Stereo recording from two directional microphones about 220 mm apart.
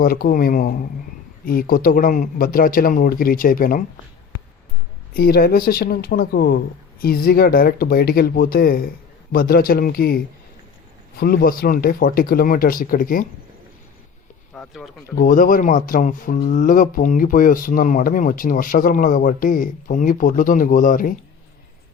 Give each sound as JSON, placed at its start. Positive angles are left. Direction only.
{"t": 0.0, "sound": "speech", "side_deg": 40}
{"t": 5.1, "sound": "speech", "side_deg": 45}
{"t": 11.2, "sound": "speech", "side_deg": 40}
{"t": 14.5, "sound": "speech", "side_deg": 5}
{"t": 15.1, "sound": "speech", "side_deg": 40}